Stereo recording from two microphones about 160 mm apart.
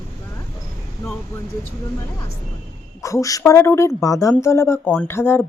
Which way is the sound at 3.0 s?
20° left (ahead or behind).